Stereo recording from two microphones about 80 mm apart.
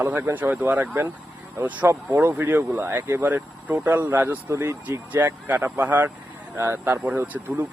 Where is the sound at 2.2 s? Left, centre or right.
Right.